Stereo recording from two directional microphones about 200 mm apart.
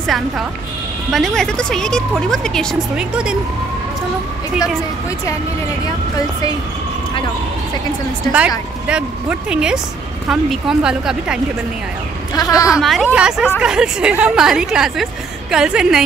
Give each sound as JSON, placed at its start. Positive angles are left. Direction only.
{"t": 1.1, "sound": "a woman's voice", "side_deg": 0}
{"t": 8.3, "sound": "a woman's voice", "side_deg": -5}
{"t": 12.4, "sound": "speech", "side_deg": 20}
{"t": 12.8, "sound": "a woman's voice", "side_deg": 0}